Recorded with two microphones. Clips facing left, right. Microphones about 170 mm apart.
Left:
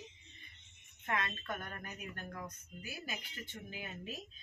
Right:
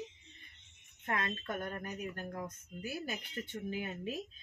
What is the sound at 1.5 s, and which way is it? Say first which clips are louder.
Speech: right 7 dB; 25° right (ahead or behind).